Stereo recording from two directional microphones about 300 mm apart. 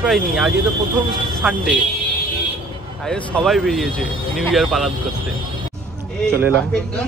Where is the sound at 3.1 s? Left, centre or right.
Centre.